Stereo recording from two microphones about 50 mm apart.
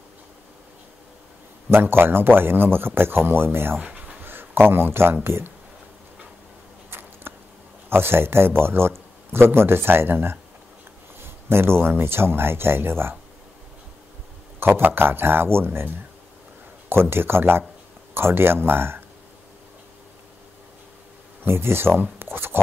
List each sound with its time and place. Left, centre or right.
1.7 s speech: right
3.8 s dog: right
4.2 s a sound: right
5.2 s speech: right
6.9 s a sound: right
7.9 s speech: right
14.6 s speech: right
16.9 s speech: right
21.5 s speech: right